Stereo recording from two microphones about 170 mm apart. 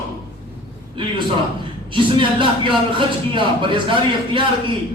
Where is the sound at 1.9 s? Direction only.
30° right (ahead or behind).